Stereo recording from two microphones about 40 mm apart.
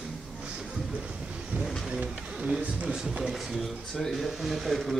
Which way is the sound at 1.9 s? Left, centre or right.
Right.